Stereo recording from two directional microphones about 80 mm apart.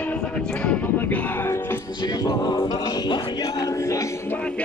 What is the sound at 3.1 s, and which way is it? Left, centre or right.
Music, left.